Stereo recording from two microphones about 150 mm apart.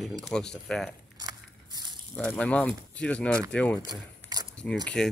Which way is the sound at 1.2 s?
25° right (ahead or behind).